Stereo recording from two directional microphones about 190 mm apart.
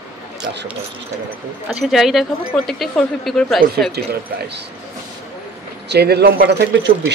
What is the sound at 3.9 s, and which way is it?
Speech, 60° right (ahead or behind).